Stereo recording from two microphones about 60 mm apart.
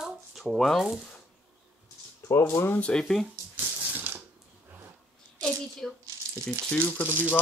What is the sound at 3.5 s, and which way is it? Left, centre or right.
Crushing, right.